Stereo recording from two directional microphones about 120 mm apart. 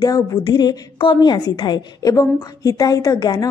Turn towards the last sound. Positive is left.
turn(degrees=35)  # may be behind; listen again after turning